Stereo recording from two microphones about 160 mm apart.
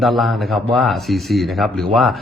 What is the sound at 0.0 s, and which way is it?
Speech, centre (ahead or behind).